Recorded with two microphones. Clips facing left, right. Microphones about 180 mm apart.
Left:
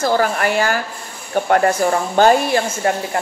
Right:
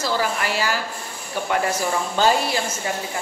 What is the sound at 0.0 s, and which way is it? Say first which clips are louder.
A woman's voice: left 6 dB; 50° left (ahead or behind).